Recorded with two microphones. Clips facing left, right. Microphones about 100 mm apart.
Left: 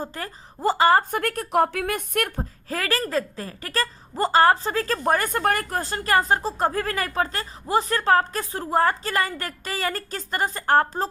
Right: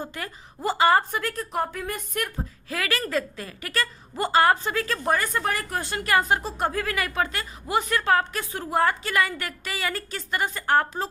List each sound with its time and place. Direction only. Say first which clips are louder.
0.0 s a woman's voice: left 2 dB; 35° left (ahead or behind); by 2.4 s 60° left (ahead or behind)
2.4 s a woman's voice: left 2 dB; 35° left (ahead or behind)